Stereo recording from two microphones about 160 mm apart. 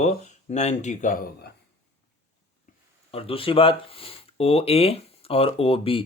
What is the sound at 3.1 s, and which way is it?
Speech, 35° left (ahead or behind).